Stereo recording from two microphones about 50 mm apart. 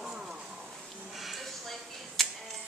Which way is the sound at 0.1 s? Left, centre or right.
Right.